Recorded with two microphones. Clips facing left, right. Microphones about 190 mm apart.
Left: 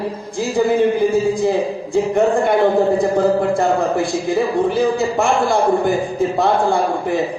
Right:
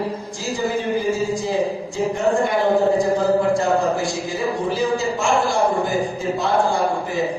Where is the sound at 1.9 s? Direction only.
55° left (ahead or behind).